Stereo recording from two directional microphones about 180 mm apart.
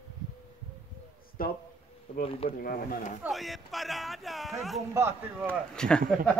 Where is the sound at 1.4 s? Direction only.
55° left (ahead or behind).